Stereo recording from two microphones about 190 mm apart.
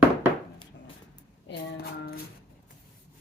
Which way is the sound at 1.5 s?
55° left (ahead or behind).